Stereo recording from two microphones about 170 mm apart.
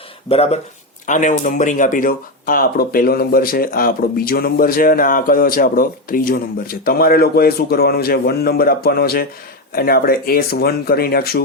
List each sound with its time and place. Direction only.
0.3 s speech: 35° left (ahead or behind)
1.0 s speech: 50° left (ahead or behind); by 11.4 s 65° left (ahead or behind)